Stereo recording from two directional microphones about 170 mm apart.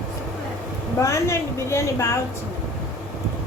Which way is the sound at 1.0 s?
20° left (ahead or behind).